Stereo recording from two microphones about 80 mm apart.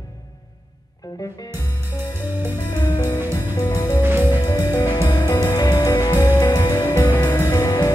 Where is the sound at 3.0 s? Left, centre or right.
Left.